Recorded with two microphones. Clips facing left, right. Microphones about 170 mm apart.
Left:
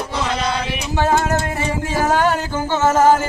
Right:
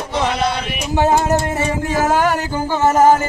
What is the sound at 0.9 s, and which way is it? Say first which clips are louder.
Music: right 3 dB; 15° right (ahead or behind).